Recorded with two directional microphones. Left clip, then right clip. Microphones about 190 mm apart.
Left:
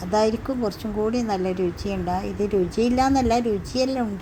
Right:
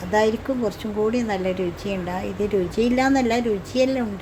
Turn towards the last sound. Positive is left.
turn(degrees=15)  # may be behind; listen again after turning